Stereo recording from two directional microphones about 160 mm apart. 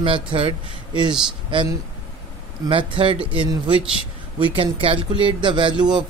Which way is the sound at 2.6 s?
30° right (ahead or behind).